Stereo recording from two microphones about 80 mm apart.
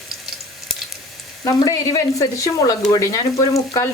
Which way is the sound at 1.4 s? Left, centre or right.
Left.